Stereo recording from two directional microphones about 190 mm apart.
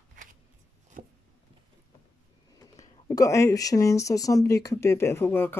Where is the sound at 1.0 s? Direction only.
45° right (ahead or behind).